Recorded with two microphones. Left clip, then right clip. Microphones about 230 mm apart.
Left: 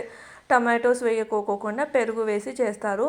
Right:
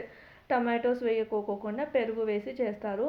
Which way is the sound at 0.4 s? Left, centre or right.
Centre.